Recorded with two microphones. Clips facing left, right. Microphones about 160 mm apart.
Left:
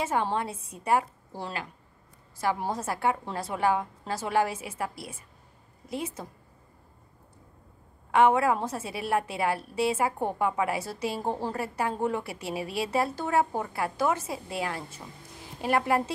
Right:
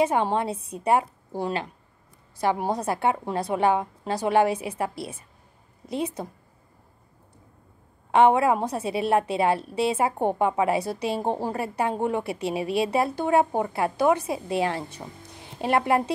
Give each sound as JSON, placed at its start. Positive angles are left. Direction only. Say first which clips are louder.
{"t": 0.0, "sound": "a woman's voice", "louder": "right 5 dB", "side_deg": -20}
{"t": 8.1, "sound": "a woman's voice", "louder": "right 3 dB", "side_deg": -20}